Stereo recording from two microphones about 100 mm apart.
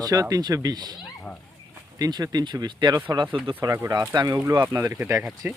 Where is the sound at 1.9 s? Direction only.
40° right (ahead or behind).